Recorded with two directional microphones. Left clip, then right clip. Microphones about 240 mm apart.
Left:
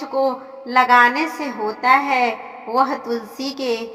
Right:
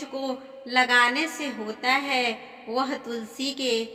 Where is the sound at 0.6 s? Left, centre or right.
Left.